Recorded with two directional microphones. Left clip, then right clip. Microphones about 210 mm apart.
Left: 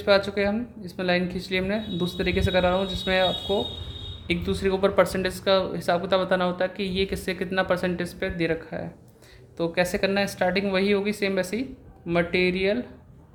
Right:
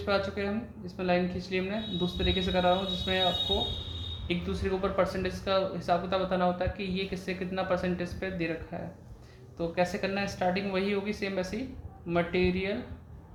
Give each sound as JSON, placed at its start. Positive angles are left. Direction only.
{"t": 0.0, "sound": "speech", "side_deg": 55}
{"t": 4.3, "sound": "speech", "side_deg": 55}